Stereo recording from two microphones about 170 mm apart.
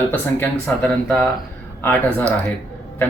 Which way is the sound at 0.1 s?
10° left (ahead or behind).